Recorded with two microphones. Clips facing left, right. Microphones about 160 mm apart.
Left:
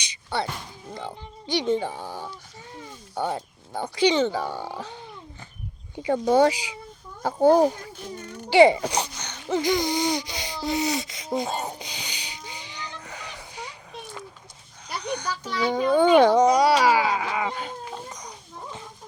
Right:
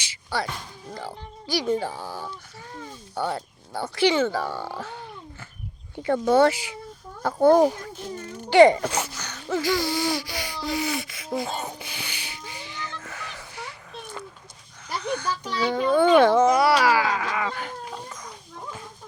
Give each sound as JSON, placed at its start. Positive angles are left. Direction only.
{"t": 0.0, "sound": "a sound", "side_deg": 20}
{"t": 0.9, "sound": "speech", "side_deg": 20}
{"t": 3.2, "sound": "speech", "side_deg": 20}
{"t": 6.0, "sound": "speech", "side_deg": 15}
{"t": 11.8, "sound": "music", "side_deg": 15}
{"t": 14.8, "sound": "a sound", "side_deg": 15}
{"t": 15.6, "sound": "speech", "side_deg": 15}